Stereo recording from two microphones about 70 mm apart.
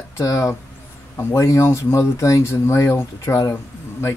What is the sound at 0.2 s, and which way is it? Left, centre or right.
Speech, left.